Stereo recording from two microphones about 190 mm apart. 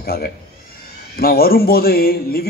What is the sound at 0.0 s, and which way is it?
A man's voice, 55° left (ahead or behind).